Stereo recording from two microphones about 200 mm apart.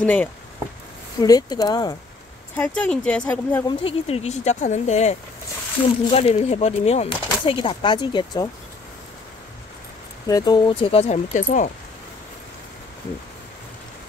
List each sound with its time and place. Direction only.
0.0 s speech: 10° left (ahead or behind)
1.2 s speech: 20° left (ahead or behind)
2.5 s speech: 5° left (ahead or behind)
3.6 s speech: 30° left (ahead or behind)
10.2 s speech: 20° left (ahead or behind); by 11.7 s 40° left (ahead or behind)